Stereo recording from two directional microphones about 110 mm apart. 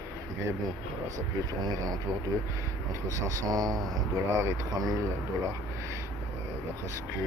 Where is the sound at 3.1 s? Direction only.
30° right (ahead or behind).